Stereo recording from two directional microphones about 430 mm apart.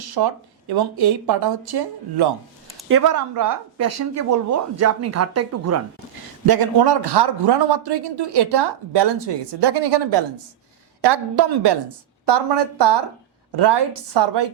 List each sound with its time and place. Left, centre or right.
0.0 s a man's voice: right
3.1 s speech: right
6.4 s a man's voice: right